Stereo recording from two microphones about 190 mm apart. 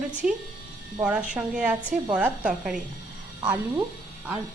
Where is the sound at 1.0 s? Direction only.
5° right (ahead or behind).